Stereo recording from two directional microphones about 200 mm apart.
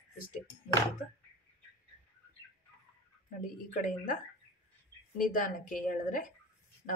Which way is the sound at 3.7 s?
40° left (ahead or behind).